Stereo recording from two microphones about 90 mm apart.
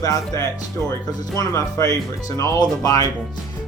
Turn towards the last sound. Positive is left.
turn(degrees=40)  # may be behind; listen again after turning